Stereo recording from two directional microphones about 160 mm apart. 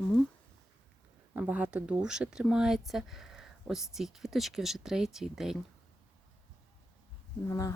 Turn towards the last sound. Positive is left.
turn(degrees=20)  # may be behind; listen again after turning